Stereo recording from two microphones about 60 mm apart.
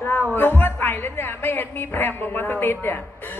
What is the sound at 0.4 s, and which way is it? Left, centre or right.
A woman's voice, left.